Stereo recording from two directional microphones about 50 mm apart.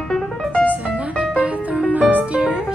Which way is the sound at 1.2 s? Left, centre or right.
Right.